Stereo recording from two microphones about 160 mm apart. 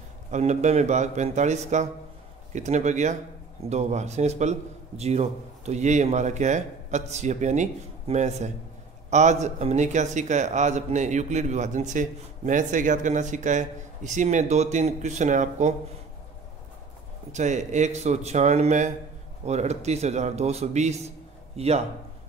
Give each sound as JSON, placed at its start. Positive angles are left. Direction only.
{"t": 0.3, "sound": "a man's voice", "side_deg": -45}
{"t": 17.3, "sound": "a man's voice", "side_deg": -50}